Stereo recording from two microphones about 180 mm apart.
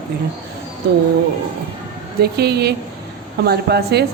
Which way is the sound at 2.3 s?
60° right (ahead or behind).